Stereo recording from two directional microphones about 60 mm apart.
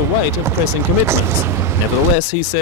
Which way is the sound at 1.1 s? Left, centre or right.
Right.